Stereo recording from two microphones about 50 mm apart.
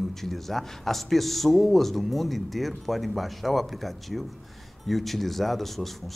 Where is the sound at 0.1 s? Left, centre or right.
Centre.